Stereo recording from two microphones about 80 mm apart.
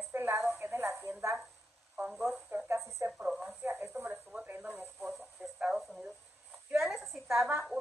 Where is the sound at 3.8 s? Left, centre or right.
Right.